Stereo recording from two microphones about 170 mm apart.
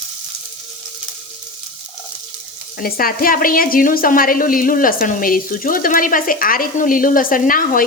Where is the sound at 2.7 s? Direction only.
60° left (ahead or behind).